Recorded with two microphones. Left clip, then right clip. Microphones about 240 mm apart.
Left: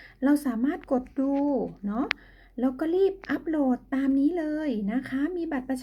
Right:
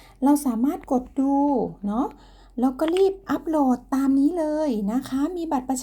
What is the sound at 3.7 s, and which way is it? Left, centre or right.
Speech, centre.